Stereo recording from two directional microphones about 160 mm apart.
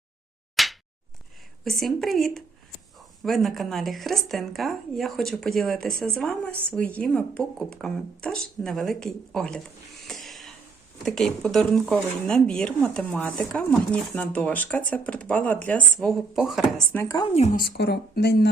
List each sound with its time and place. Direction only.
0.5 s a sound: centre (ahead or behind)
1.6 s speech: centre (ahead or behind)
10.1 s a sound: centre (ahead or behind)
11.0 s speech: 5° left (ahead or behind)
16.9 s speech: 15° left (ahead or behind)
17.5 s speech: 75° left (ahead or behind)